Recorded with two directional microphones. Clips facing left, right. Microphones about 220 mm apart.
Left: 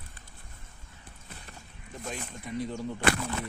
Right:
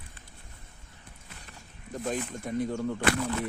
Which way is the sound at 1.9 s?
45° right (ahead or behind).